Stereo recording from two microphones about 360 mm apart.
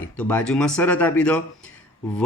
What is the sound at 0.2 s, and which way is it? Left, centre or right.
Speech, centre.